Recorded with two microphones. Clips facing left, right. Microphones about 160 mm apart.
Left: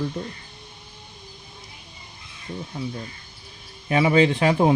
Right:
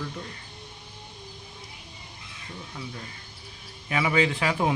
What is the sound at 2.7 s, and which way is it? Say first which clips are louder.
A man's voice: left 7 dB; 30° left (ahead or behind).